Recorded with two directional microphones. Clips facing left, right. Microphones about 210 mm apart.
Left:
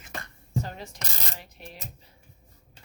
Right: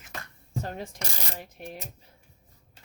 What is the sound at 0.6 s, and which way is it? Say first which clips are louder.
Speech: right 3 dB; 50° right (ahead or behind).